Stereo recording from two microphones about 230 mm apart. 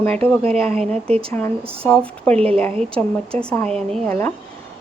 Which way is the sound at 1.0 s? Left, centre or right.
Right.